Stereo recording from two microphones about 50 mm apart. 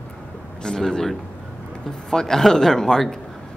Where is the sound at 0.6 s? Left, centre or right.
Centre.